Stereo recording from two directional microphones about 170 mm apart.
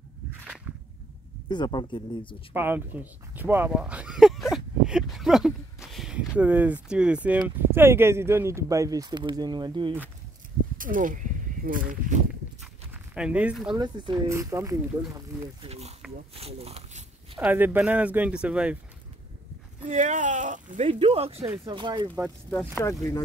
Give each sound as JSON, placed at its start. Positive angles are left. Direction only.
{"t": 1.5, "sound": "speech", "side_deg": 25}
{"t": 2.5, "sound": "speech", "side_deg": -10}
{"t": 10.8, "sound": "speech", "side_deg": -50}
{"t": 13.1, "sound": "speech", "side_deg": -5}
{"t": 13.7, "sound": "speech", "side_deg": -25}
{"t": 15.6, "sound": "speech", "side_deg": -35}
{"t": 17.4, "sound": "speech", "side_deg": -10}
{"t": 19.8, "sound": "speech", "side_deg": -45}
{"t": 21.5, "sound": "speech", "side_deg": -25}